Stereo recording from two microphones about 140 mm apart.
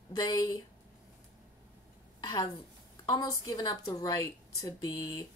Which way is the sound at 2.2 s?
30° left (ahead or behind).